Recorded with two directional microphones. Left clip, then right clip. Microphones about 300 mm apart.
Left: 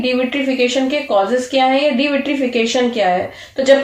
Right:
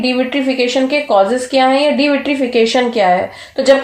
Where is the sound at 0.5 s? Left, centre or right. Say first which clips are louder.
Right 2 dB; right.